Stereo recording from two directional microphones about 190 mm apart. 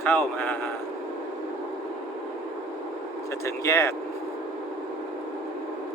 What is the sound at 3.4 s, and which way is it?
Speech, 15° left (ahead or behind).